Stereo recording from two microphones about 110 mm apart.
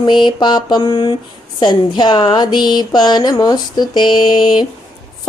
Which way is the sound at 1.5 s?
40° left (ahead or behind).